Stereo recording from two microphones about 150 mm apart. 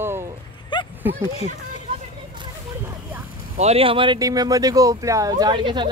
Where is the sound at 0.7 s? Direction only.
30° left (ahead or behind).